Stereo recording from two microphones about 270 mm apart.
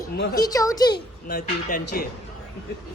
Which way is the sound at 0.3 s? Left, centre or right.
Centre.